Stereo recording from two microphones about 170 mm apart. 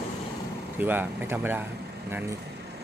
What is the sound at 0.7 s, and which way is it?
Speech, 10° right (ahead or behind).